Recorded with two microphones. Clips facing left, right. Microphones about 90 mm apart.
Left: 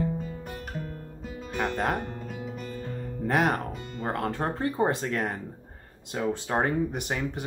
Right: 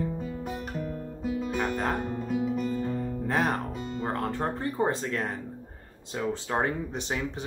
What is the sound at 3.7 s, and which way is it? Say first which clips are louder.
Music: right 1 dB; 25° right (ahead or behind).